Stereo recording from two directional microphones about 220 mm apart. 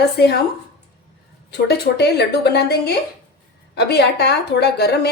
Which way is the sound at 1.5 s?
50° left (ahead or behind).